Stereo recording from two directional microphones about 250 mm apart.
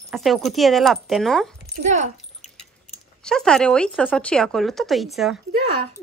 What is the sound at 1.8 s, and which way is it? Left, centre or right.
Speech, right.